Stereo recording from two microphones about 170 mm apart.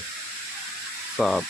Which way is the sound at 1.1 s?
Centre (ahead or behind).